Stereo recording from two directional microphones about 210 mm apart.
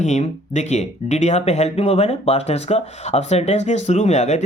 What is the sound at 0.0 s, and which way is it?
Speech, 35° left (ahead or behind).